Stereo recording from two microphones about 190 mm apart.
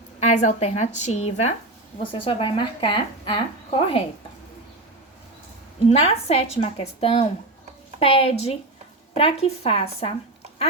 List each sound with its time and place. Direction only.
0.2 s a woman's voice: 35° left (ahead or behind)
5.9 s speech: 30° left (ahead or behind)